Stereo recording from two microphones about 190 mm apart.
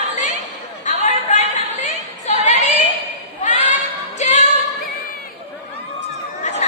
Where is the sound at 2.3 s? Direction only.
35° left (ahead or behind).